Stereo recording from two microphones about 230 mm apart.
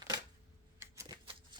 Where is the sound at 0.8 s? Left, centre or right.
Centre.